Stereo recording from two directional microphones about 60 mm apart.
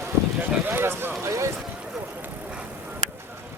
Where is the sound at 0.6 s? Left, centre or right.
Right.